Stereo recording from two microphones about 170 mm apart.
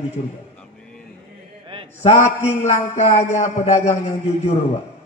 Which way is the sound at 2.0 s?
40° left (ahead or behind).